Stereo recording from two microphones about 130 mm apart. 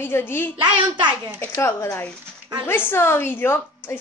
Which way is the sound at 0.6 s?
35° right (ahead or behind).